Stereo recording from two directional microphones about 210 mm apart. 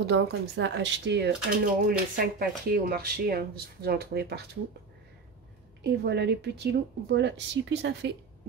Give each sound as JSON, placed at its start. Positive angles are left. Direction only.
{"t": 0.0, "sound": "speech", "side_deg": -50}
{"t": 5.9, "sound": "speech", "side_deg": -55}